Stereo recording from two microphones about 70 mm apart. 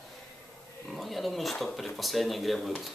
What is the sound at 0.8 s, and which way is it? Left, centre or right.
Speech, centre.